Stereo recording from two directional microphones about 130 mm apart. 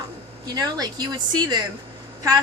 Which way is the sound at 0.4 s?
30° right (ahead or behind).